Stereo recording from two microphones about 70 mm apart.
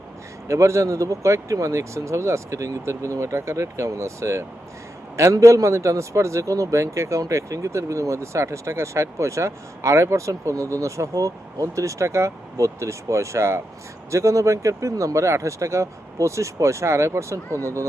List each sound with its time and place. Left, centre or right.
0.4 s a man's voice: right